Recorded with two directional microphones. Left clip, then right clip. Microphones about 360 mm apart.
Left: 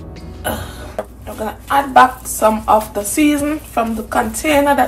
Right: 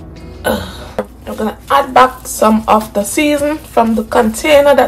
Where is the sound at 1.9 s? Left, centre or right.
Right.